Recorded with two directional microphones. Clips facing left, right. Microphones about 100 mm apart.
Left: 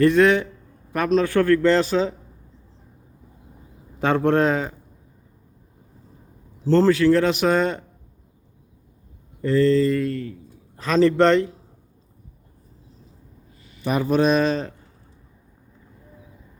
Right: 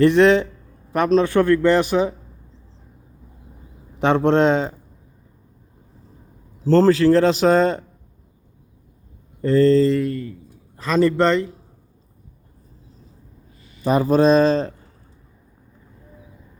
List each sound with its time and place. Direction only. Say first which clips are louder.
0.0 s a man's voice: right 2 dB; 25° right (ahead or behind)
4.0 s a man's voice: right 3 dB; 20° right (ahead or behind)
6.7 s a man's voice: right 2 dB; 35° right (ahead or behind)
9.4 s a man's voice: right 3 dB; 35° right (ahead or behind)
10.8 s speech: even; centre (ahead or behind)
13.8 s a man's voice: right 4 dB; 35° right (ahead or behind)